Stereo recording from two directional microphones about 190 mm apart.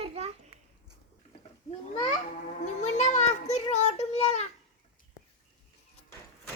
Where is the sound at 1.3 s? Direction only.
30° left (ahead or behind).